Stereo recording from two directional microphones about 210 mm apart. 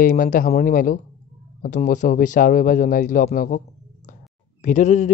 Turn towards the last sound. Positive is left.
turn(degrees=35)  # may be behind; listen again after turning